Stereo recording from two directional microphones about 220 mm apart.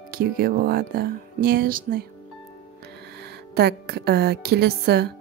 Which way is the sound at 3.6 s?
45° right (ahead or behind).